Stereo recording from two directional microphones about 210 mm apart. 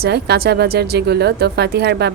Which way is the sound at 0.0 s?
50° right (ahead or behind).